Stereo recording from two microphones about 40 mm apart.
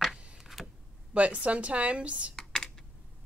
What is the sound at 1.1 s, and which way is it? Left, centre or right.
Speech, right.